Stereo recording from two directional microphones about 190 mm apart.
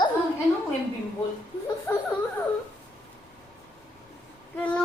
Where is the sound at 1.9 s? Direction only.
15° left (ahead or behind).